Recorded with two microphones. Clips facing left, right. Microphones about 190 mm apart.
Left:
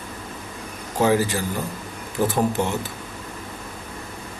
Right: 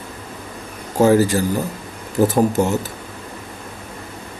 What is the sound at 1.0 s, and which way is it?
A man's voice, 40° right (ahead or behind).